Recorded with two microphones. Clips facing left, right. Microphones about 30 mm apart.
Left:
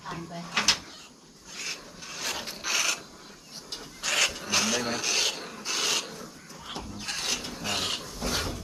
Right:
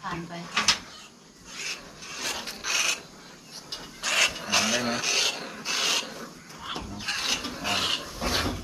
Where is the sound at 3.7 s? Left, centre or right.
Centre.